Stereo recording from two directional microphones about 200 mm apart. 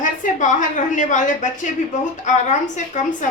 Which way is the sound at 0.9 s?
40° left (ahead or behind).